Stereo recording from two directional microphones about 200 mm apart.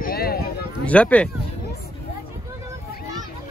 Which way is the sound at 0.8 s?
5° left (ahead or behind).